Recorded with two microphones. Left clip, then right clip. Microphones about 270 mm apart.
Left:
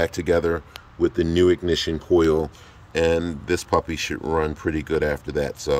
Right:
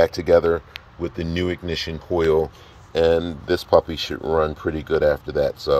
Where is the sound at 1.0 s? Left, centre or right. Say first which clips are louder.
Left 7 dB; centre.